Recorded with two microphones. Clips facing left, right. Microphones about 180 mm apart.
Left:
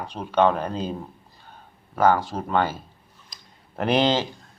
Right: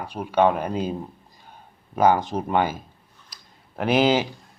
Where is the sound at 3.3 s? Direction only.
Centre (ahead or behind).